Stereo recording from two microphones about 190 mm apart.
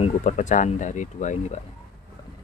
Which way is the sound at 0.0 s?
40° left (ahead or behind).